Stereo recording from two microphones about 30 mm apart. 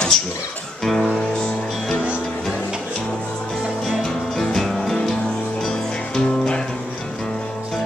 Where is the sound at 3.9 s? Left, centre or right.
Centre.